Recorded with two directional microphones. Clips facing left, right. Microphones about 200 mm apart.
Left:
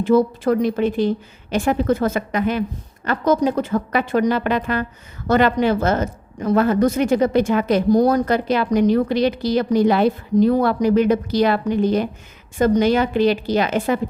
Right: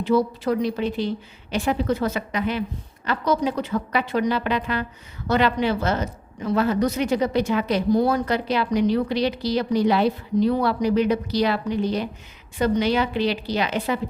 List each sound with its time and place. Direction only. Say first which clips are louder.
0.0 s speech: left 5 dB; 50° left (ahead or behind)